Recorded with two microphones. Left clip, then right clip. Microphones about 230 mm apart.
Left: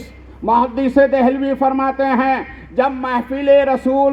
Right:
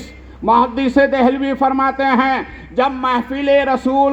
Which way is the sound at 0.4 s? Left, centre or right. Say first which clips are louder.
Right 1 dB; right.